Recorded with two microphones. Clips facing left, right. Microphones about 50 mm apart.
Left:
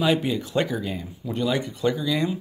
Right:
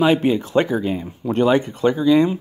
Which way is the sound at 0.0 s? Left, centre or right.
Right.